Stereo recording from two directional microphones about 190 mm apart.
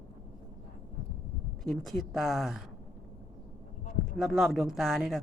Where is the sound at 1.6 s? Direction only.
Centre (ahead or behind).